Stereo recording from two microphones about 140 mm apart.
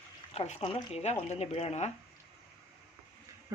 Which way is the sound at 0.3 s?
50° left (ahead or behind).